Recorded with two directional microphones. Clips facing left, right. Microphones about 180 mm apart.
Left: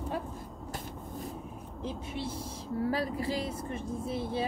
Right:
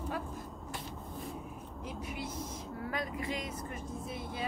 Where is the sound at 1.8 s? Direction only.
30° left (ahead or behind).